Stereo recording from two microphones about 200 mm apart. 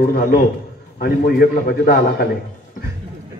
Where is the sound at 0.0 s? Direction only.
50° left (ahead or behind).